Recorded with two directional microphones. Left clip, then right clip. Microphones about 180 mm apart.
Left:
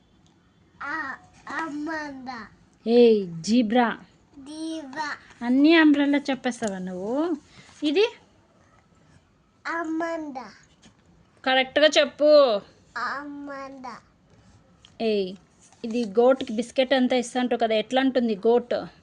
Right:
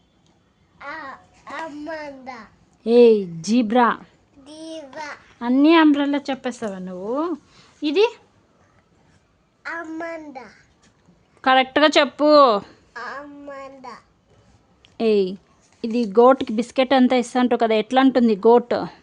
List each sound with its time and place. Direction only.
0.8 s a child's voice: 5° right (ahead or behind)
2.8 s a woman's voice: 25° right (ahead or behind)
4.4 s child singing: 5° right (ahead or behind)
5.4 s speech: 20° right (ahead or behind)
9.6 s babbling: 5° left (ahead or behind)
11.4 s speech: 35° right (ahead or behind)
12.9 s babbling: 5° left (ahead or behind)
14.8 s a sound: 35° right (ahead or behind)
15.8 s speech: 35° right (ahead or behind)